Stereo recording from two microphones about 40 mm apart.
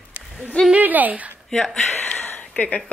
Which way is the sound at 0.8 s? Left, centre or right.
Right.